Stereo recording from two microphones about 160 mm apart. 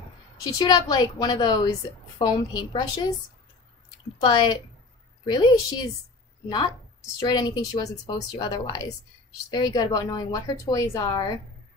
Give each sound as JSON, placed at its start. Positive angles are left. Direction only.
{"t": 0.4, "sound": "a woman's voice", "side_deg": 25}
{"t": 4.2, "sound": "a woman's voice", "side_deg": 30}
{"t": 7.2, "sound": "a woman's voice", "side_deg": 25}